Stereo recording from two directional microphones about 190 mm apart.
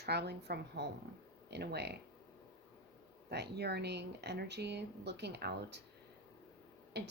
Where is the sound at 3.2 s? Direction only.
60° right (ahead or behind).